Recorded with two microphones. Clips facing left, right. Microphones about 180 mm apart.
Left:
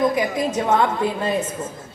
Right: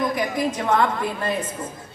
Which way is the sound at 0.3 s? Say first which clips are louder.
Left 2 dB; 25° left (ahead or behind).